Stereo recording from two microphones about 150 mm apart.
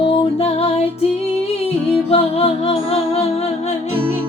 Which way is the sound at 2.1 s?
40° left (ahead or behind).